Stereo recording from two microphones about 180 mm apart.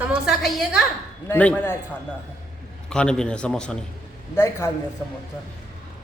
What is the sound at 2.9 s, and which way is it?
Speech, 5° left (ahead or behind).